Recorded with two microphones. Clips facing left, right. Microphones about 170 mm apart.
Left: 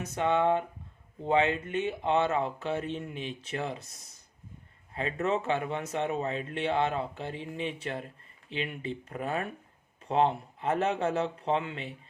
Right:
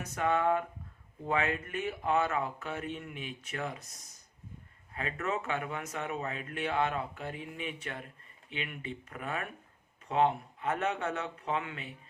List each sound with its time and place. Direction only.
0.0 s speech: 25° left (ahead or behind)